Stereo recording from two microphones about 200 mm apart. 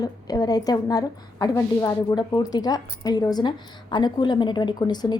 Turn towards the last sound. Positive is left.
turn(degrees=20)  # may be behind; listen again after turning